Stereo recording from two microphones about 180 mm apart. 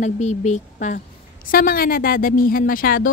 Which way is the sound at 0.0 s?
40° left (ahead or behind).